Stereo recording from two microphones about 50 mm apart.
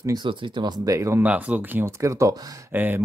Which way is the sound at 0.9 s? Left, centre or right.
Right.